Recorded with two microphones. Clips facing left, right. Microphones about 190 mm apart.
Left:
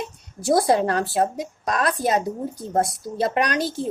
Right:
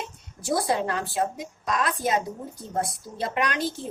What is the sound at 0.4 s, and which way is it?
Speech, 40° left (ahead or behind).